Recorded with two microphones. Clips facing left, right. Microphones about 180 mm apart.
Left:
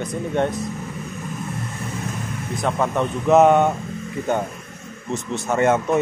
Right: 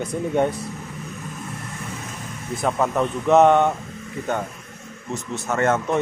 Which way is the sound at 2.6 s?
5° right (ahead or behind).